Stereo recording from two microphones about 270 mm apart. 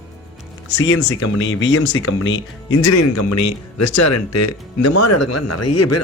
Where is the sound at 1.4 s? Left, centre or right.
Left.